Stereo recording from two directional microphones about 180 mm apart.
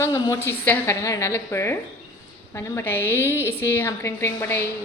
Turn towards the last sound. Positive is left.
turn(degrees=15)  # may be behind; listen again after turning